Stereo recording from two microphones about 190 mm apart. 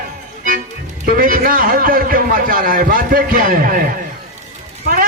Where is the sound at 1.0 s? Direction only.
50° right (ahead or behind).